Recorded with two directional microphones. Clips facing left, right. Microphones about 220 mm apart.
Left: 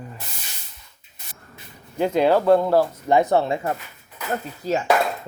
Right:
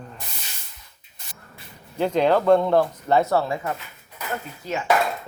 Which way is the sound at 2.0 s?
10° left (ahead or behind).